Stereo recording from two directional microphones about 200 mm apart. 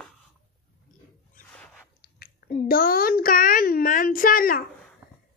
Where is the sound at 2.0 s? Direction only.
50° left (ahead or behind).